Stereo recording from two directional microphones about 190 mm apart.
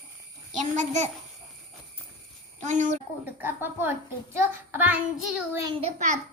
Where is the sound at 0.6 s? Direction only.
35° right (ahead or behind).